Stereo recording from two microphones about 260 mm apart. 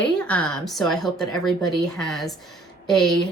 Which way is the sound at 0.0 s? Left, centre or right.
Centre.